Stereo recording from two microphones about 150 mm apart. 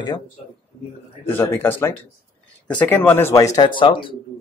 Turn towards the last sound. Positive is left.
turn(degrees=35)  # may be behind; listen again after turning